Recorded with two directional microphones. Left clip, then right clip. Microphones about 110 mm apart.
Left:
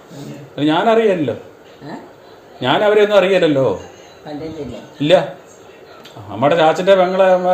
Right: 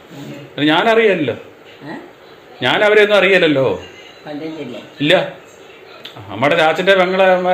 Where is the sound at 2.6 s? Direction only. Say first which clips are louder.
Right 1 dB; 20° left (ahead or behind).